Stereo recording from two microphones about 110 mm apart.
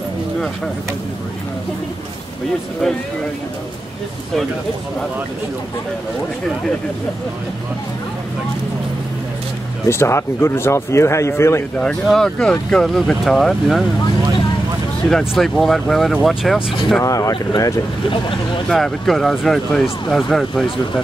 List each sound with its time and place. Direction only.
9.8 s speech: 25° left (ahead or behind)
11.8 s speech: 5° left (ahead or behind)
15.0 s speech: 5° left (ahead or behind)
17.0 s speech: 30° left (ahead or behind)
17.3 s speech: 45° left (ahead or behind)
18.7 s speech: 5° left (ahead or behind)